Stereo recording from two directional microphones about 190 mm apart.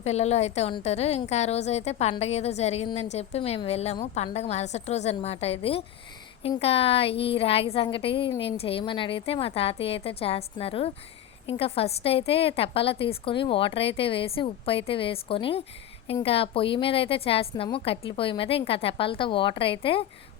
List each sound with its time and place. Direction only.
0.0 s a woman's voice: 35° left (ahead or behind)